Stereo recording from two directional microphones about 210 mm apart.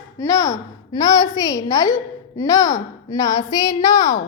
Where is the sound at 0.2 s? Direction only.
15° left (ahead or behind).